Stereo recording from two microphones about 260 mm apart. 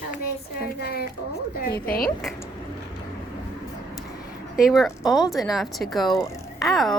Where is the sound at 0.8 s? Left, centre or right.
Left.